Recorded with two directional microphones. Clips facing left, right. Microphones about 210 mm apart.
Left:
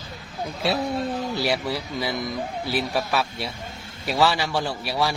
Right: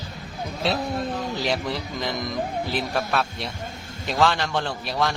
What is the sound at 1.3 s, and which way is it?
Speech, 10° left (ahead or behind).